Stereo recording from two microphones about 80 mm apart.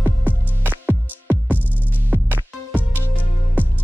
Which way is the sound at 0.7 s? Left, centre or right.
Right.